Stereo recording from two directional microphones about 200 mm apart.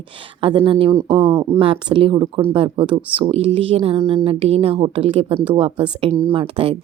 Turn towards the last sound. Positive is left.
turn(degrees=-25)  # may be behind; listen again after turning